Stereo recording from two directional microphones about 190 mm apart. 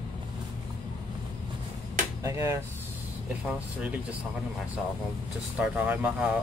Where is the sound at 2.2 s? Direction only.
15° right (ahead or behind).